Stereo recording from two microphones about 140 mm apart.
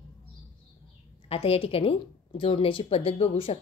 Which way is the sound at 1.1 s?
45° left (ahead or behind).